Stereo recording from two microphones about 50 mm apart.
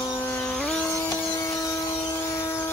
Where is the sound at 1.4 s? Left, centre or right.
Left.